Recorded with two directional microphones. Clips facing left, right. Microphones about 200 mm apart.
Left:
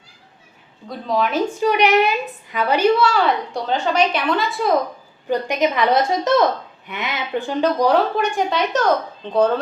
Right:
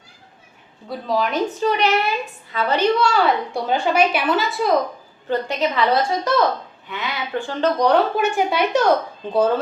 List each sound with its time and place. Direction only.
0.9 s a woman's voice: centre (ahead or behind)
1.5 s a woman's voice: 10° left (ahead or behind)
5.3 s a woman's voice: 15° left (ahead or behind); by 9.6 s 5° right (ahead or behind)